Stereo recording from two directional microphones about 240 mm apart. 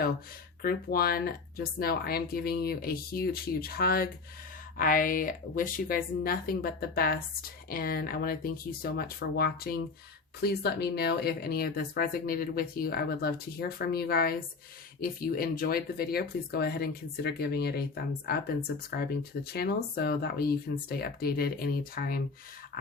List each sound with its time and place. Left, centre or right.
0.6 s speech: left
19.5 s speech: left